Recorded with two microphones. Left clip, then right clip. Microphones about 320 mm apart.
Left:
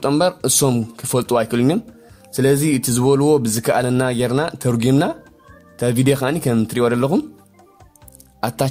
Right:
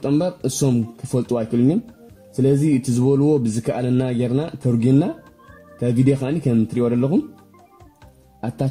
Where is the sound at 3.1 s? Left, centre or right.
Left.